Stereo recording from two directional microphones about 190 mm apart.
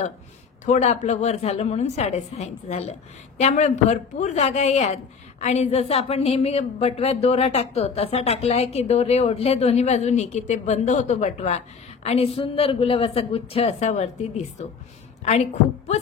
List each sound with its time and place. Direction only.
0.7 s a woman's voice: 35° left (ahead or behind)